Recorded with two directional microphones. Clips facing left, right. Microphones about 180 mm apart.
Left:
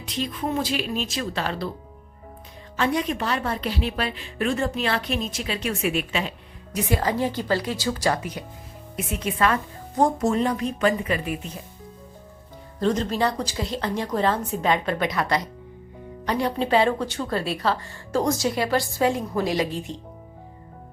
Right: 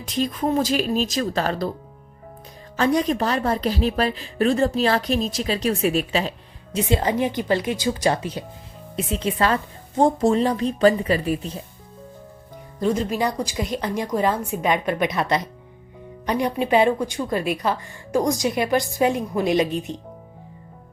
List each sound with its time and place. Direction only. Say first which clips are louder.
0.0 s speech: right 5 dB; 45° right (ahead or behind)
2.7 s speech: right 4 dB; 40° right (ahead or behind)
6.7 s a woman's voice: right 3 dB; 25° right (ahead or behind)
12.8 s speech: right 1 dB; 10° right (ahead or behind)